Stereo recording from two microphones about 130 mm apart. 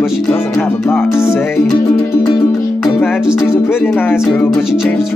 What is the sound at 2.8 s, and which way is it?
Music, 5° right (ahead or behind).